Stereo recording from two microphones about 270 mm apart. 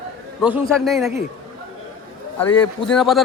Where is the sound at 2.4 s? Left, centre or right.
Centre.